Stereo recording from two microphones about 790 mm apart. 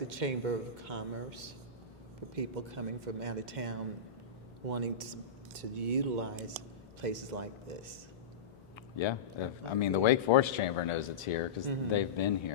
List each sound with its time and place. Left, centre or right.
0.1 s speech: right
9.0 s speech: left